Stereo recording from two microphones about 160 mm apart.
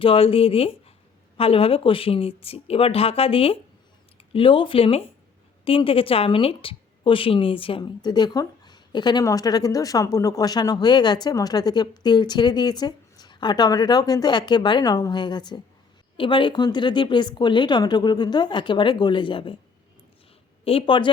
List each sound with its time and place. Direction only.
0.0 s a woman's voice: 35° left (ahead or behind)
20.7 s speech: 35° left (ahead or behind)